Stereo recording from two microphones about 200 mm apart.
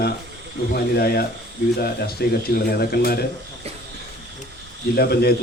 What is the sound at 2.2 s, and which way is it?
Speech, 50° left (ahead or behind).